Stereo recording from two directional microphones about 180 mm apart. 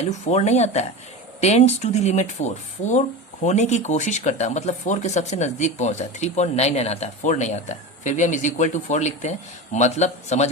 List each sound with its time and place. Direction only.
0.0 s speech: 35° left (ahead or behind)